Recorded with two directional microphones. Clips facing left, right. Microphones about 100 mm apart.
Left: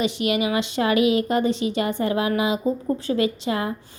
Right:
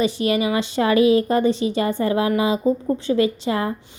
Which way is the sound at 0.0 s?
35° right (ahead or behind).